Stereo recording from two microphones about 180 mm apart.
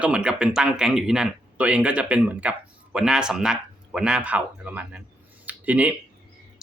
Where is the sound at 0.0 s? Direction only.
5° right (ahead or behind).